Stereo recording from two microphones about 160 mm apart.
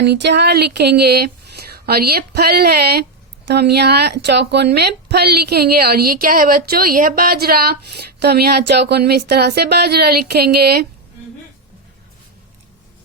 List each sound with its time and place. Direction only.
0.0 s speech: 90° right
1.7 s speech: 75° right (ahead or behind)
8.2 s speech: 85° right